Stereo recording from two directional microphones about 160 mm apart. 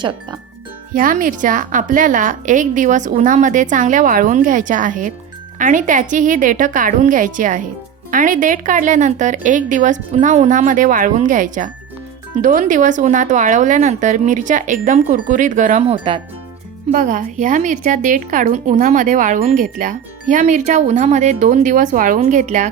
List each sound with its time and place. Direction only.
0.9 s a woman's voice: 60° right (ahead or behind)
15.8 s speech: 35° right (ahead or behind)
16.9 s a woman's voice: 55° right (ahead or behind)